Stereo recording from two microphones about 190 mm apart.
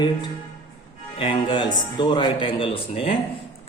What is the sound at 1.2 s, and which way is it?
A man's voice, 25° left (ahead or behind).